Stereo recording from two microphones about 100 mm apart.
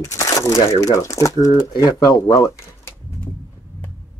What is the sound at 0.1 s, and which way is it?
Speech, 30° left (ahead or behind).